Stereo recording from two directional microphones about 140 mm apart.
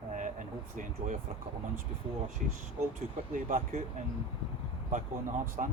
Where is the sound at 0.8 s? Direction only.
70° right (ahead or behind).